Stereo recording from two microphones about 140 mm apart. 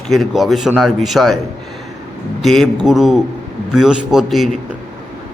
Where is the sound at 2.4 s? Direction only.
Centre (ahead or behind).